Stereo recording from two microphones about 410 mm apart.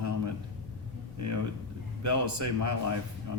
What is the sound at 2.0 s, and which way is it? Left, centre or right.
Speech, right.